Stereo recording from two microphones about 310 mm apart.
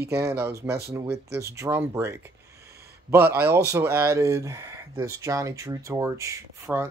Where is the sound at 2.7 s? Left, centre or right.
Right.